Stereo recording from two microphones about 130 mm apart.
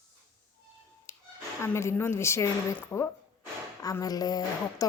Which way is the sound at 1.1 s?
20° left (ahead or behind).